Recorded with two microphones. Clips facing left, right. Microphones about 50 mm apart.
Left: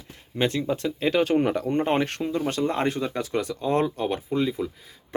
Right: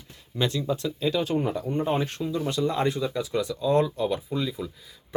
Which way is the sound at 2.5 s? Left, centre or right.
Left.